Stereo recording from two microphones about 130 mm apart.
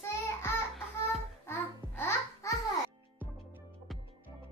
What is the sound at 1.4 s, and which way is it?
Babbling, 20° left (ahead or behind).